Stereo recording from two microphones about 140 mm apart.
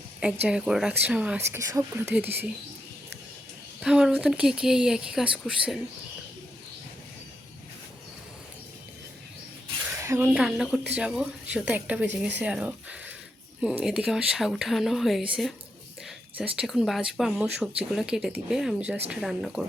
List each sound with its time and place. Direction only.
0.4 s a woman's voice: 5° right (ahead or behind)
1.5 s a woman's voice: 20° right (ahead or behind)
3.8 s speech: 5° right (ahead or behind)
10.0 s a sound: 20° right (ahead or behind)
10.2 s a woman's voice: 5° right (ahead or behind)
16.6 s speech: centre (ahead or behind)